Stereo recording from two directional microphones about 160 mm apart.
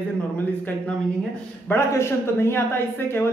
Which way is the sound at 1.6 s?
15° left (ahead or behind).